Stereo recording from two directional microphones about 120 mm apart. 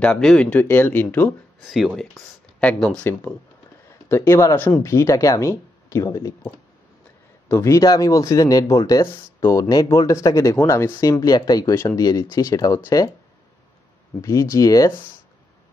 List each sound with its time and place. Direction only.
0.0 s speech: 5° left (ahead or behind)
1.7 s speech: centre (ahead or behind); by 6.3 s 25° left (ahead or behind)
7.4 s speech: 25° left (ahead or behind)
14.2 s speech: 25° left (ahead or behind)